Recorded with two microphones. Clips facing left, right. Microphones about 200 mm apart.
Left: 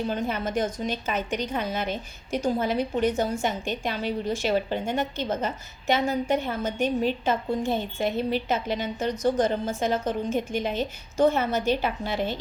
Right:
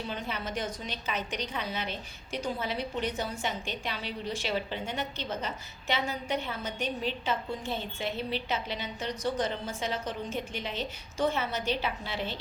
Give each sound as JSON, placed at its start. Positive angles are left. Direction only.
{"t": 0.1, "sound": "a woman's voice", "side_deg": 45}